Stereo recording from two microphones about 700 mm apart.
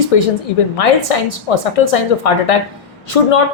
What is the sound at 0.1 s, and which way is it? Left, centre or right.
Speech, left.